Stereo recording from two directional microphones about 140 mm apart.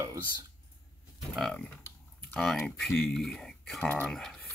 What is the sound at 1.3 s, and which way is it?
Speech, 5° left (ahead or behind).